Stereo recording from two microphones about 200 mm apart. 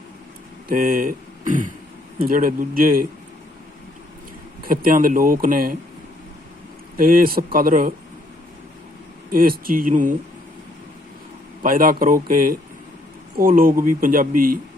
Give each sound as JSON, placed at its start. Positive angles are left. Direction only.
{"t": 0.7, "sound": "speech", "side_deg": -45}
{"t": 4.6, "sound": "speech", "side_deg": -45}
{"t": 6.9, "sound": "speech", "side_deg": -45}
{"t": 9.3, "sound": "speech", "side_deg": -45}
{"t": 11.6, "sound": "speech", "side_deg": -45}